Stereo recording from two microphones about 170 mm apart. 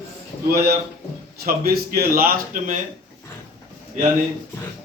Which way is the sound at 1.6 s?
60° right (ahead or behind).